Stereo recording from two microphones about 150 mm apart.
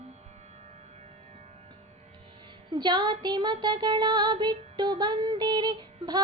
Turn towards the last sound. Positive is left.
turn(degrees=-30)  # may be behind; listen again after turning